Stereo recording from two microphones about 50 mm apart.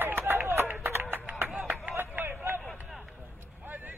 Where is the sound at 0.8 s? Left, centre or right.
Right.